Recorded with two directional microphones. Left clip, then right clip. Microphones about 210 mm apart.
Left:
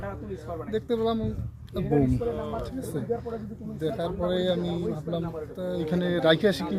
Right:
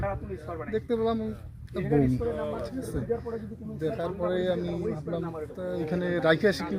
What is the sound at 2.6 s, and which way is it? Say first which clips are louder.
Speech: left 1 dB; centre (ahead or behind).